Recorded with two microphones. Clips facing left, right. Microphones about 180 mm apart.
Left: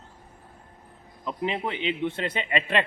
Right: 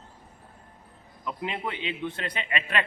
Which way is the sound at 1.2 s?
25° left (ahead or behind).